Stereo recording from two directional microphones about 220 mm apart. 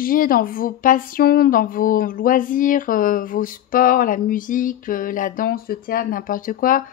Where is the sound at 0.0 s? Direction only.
40° left (ahead or behind).